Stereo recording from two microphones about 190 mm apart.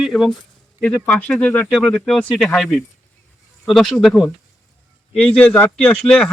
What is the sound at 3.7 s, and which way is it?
Speech, centre (ahead or behind).